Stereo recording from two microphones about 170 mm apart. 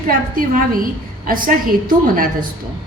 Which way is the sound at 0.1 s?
55° right (ahead or behind).